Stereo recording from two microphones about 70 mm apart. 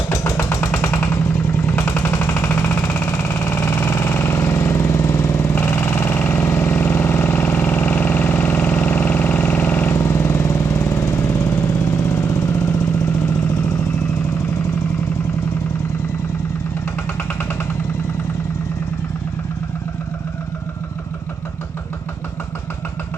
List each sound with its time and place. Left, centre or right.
0.1 s vehicle: left
2.0 s a sound: left
2.9 s vehicle: left
9.9 s vehicle: left